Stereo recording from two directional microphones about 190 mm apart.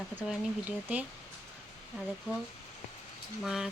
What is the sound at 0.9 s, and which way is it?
Speech, 10° right (ahead or behind).